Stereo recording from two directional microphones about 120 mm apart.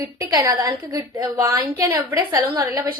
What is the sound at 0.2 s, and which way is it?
A woman's voice, 30° right (ahead or behind).